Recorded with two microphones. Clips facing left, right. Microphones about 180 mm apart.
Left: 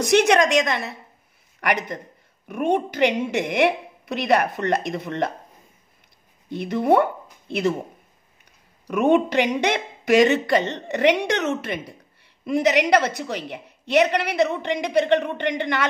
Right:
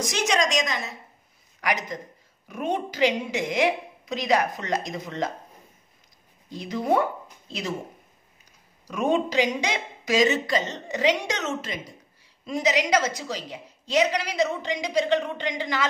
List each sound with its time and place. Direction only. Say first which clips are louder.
0.0 s speech: left 8 dB; 60° left (ahead or behind)
6.5 s speech: left 5 dB; 60° left (ahead or behind)
8.8 s speech: left 6 dB; 60° left (ahead or behind)